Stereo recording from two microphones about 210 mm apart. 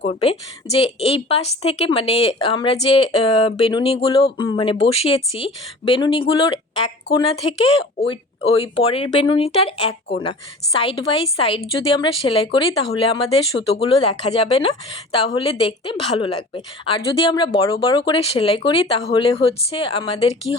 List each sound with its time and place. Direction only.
0.0 s speech: 30° left (ahead or behind)